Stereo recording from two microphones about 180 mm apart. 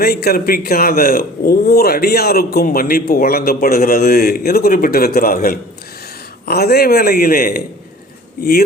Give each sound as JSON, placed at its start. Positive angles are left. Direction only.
{"t": 0.0, "sound": "a man's voice", "side_deg": 60}